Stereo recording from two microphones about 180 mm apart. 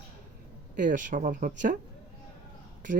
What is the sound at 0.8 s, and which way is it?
Speech, 45° right (ahead or behind).